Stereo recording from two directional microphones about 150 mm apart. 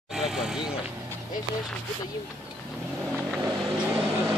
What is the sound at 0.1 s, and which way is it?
Vehicle, 5° right (ahead or behind).